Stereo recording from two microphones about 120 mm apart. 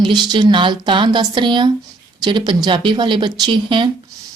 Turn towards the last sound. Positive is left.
turn(degrees=-45)  # may be behind; listen again after turning